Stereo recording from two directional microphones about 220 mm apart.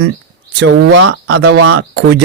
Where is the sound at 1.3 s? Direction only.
90° right.